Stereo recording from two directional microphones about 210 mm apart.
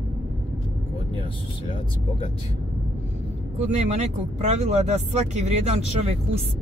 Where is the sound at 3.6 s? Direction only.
30° right (ahead or behind).